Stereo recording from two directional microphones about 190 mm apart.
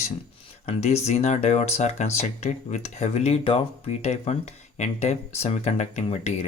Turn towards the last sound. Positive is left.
turn(degrees=35)  # may be behind; listen again after turning